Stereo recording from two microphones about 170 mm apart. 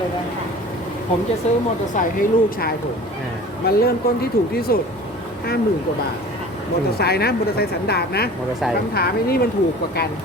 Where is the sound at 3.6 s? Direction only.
65° left (ahead or behind).